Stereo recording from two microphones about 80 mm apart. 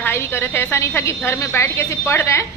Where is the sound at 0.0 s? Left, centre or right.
Left.